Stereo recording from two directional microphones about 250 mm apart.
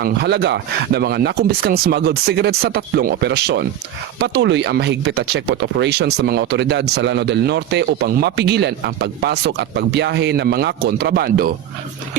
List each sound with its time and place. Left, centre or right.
0.0 s speech: right